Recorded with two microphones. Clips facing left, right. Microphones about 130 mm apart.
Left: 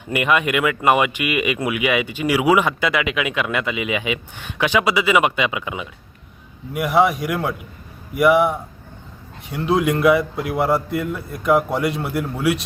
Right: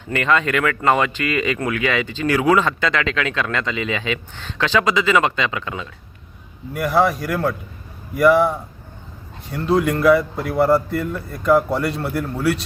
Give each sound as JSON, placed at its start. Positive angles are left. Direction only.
{"t": 0.1, "sound": "speech", "side_deg": 15}